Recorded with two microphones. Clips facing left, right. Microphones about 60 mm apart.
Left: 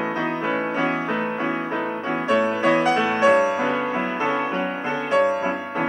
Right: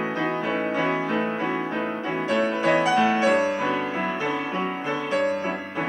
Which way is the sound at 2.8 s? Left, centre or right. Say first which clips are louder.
Left 1 dB; left.